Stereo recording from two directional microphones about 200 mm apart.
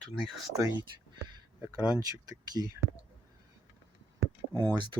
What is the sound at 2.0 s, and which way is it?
Speech, 20° right (ahead or behind).